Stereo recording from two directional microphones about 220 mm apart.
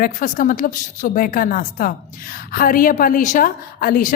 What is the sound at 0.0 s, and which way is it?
A woman's voice, 40° left (ahead or behind).